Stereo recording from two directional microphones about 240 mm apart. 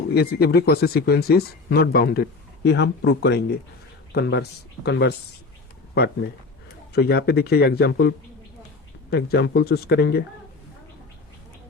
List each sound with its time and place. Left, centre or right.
0.1 s speech: left
6.9 s speech: left